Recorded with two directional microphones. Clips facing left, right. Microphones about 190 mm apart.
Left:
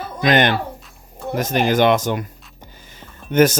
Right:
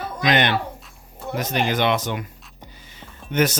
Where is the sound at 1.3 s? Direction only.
45° left (ahead or behind).